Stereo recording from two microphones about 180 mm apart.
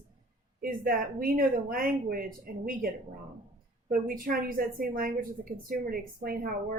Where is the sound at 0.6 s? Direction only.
50° right (ahead or behind).